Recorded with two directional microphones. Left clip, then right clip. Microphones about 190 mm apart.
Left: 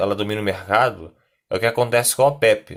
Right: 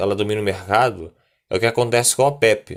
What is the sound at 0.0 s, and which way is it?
Speech, 25° right (ahead or behind).